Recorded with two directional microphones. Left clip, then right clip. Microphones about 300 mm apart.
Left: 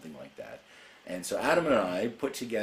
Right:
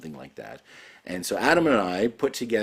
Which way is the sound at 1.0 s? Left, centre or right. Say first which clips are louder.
Right 6 dB; right.